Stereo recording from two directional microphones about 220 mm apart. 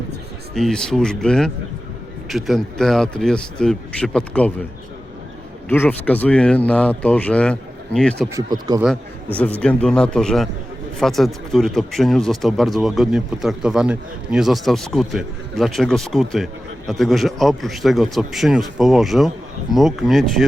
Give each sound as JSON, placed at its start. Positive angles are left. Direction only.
{"t": 0.5, "sound": "speech", "side_deg": 0}
{"t": 5.6, "sound": "speech", "side_deg": 10}
{"t": 8.3, "sound": "speech", "side_deg": -15}
{"t": 8.8, "sound": "speech", "side_deg": 5}